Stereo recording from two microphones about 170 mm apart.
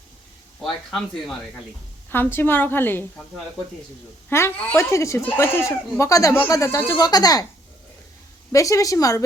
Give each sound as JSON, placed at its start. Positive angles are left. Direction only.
{"t": 0.6, "sound": "speech", "side_deg": 5}
{"t": 4.3, "sound": "speech", "side_deg": 15}
{"t": 8.5, "sound": "a woman's voice", "side_deg": 20}